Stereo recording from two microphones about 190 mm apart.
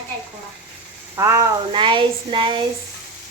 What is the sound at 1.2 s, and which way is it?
Speech, 15° right (ahead or behind).